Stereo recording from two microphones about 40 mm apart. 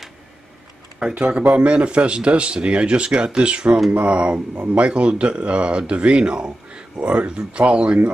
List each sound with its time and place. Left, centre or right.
0.9 s speech: right